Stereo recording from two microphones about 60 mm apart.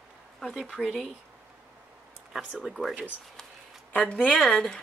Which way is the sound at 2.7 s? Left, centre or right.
Centre.